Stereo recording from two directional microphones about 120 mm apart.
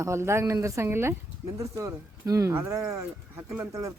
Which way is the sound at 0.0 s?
25° right (ahead or behind).